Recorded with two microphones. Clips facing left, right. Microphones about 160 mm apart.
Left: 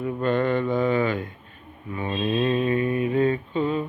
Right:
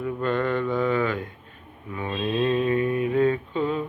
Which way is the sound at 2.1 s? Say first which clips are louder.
Even; 5° left (ahead or behind).